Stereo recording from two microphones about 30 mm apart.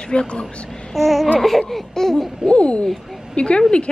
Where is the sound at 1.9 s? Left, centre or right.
Centre.